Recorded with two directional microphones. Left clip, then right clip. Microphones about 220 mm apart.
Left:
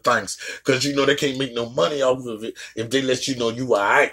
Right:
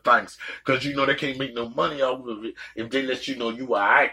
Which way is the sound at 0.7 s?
50° left (ahead or behind).